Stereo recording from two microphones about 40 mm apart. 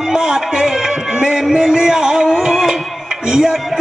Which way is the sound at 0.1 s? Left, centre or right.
Centre.